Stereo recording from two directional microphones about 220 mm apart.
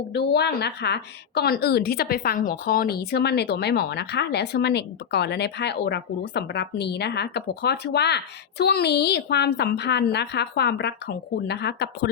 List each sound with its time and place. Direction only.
0.1 s a woman's voice: 50° left (ahead or behind)